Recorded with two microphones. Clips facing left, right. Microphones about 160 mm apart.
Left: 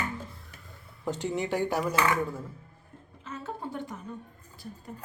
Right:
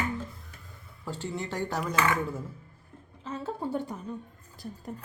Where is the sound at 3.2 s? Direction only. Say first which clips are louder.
Right 4 dB; 35° right (ahead or behind).